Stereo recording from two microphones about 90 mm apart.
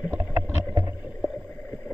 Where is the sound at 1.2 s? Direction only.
15° left (ahead or behind).